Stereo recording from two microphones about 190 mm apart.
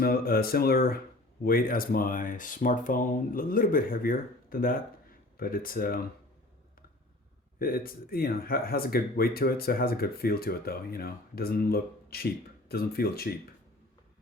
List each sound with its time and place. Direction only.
0.0 s speech: 55° left (ahead or behind)
7.6 s speech: 50° left (ahead or behind)